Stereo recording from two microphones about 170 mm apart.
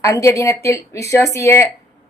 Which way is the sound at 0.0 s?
20° left (ahead or behind).